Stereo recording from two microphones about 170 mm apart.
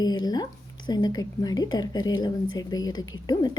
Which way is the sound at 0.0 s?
25° left (ahead or behind).